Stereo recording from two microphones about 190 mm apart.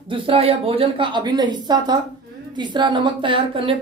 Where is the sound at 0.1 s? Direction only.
30° right (ahead or behind).